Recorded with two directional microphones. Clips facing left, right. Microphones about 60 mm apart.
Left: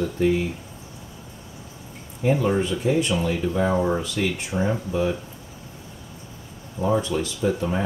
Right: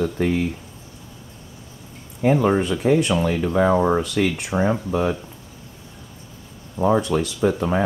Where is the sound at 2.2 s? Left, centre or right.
Right.